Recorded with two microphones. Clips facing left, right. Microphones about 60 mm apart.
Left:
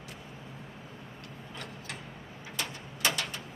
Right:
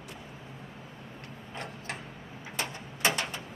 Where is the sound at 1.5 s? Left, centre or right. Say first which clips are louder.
Right 4 dB; right.